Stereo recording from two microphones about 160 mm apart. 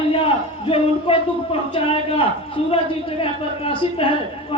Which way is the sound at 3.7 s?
35° left (ahead or behind).